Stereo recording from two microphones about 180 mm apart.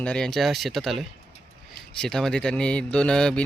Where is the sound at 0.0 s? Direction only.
5° left (ahead or behind).